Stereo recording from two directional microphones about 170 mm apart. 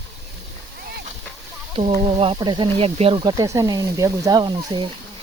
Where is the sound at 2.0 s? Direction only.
35° right (ahead or behind).